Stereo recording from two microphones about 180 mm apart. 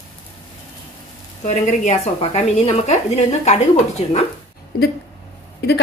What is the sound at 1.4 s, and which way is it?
A woman's voice, 40° left (ahead or behind).